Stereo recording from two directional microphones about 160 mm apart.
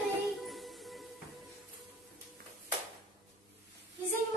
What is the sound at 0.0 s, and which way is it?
Music, centre (ahead or behind).